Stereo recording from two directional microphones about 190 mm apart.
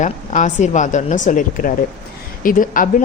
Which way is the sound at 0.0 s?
40° left (ahead or behind).